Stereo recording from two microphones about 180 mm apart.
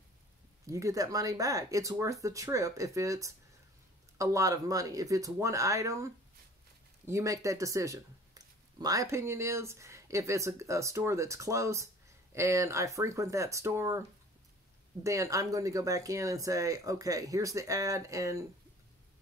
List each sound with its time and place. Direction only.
0.7 s speech: 15° right (ahead or behind)
15.0 s speech: 15° right (ahead or behind)